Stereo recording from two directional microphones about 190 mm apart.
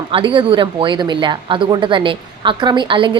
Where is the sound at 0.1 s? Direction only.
25° right (ahead or behind).